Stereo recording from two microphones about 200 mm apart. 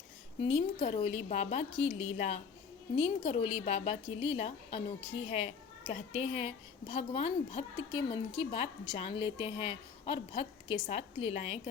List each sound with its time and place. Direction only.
0.3 s a woman's voice: 30° left (ahead or behind)